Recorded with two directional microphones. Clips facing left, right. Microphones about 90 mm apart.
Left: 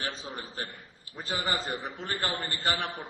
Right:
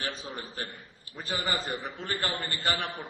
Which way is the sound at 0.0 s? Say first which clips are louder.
Even; 30° left (ahead or behind).